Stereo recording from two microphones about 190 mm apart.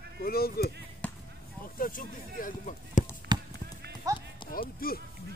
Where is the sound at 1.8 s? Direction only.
50° left (ahead or behind).